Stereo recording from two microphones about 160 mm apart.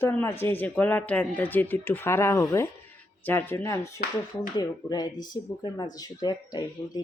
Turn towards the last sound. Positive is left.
turn(degrees=25)  # may be behind; listen again after turning